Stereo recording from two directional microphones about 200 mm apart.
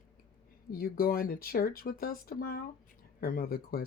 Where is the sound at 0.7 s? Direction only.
45° left (ahead or behind).